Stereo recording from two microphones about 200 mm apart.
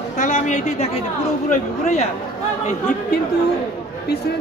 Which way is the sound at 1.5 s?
35° left (ahead or behind).